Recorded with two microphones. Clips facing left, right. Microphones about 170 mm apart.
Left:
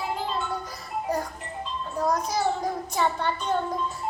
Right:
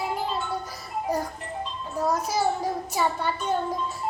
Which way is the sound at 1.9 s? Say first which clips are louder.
Right 1 dB; 5° right (ahead or behind).